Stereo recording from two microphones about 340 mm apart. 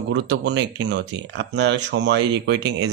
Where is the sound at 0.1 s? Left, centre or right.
Right.